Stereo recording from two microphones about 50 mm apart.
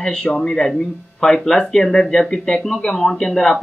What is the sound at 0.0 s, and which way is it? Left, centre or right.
Speech, centre.